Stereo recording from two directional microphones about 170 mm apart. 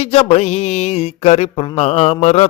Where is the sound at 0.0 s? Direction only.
40° left (ahead or behind).